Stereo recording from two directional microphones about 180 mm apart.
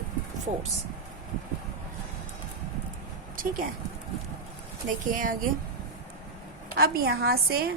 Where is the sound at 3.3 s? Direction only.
50° right (ahead or behind).